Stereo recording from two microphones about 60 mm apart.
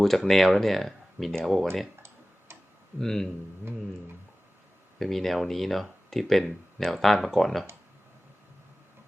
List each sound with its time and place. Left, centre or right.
0.0 s speech: centre
2.0 s tick-tock: right
3.0 s a man's voice: centre
4.9 s speech: centre